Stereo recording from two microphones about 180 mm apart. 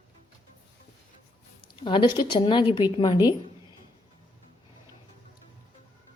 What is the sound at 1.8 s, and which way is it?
A woman's voice, 25° left (ahead or behind).